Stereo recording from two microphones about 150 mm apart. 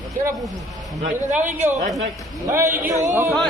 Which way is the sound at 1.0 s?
55° right (ahead or behind).